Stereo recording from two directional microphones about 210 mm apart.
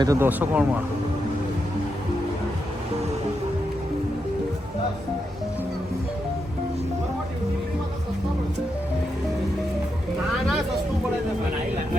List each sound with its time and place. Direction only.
0.0 s speech: 15° right (ahead or behind)